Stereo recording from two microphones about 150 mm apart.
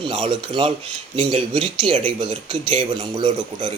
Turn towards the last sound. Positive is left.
turn(degrees=-40)  # may be behind; listen again after turning